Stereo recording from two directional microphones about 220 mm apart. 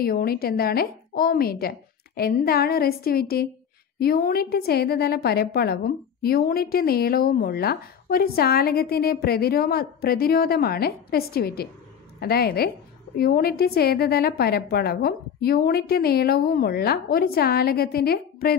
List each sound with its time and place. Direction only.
0.0 s a woman's voice: 45° left (ahead or behind)